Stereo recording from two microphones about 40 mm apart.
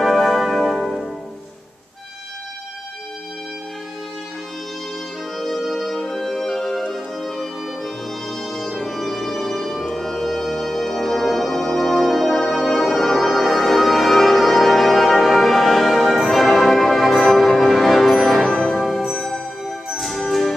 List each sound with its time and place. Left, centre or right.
0.0 s music: centre
5.4 s music: centre
18.5 s music: centre
18.8 s music: centre